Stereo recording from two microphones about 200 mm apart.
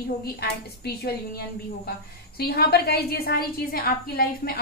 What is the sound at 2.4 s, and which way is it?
A woman's voice, 50° left (ahead or behind).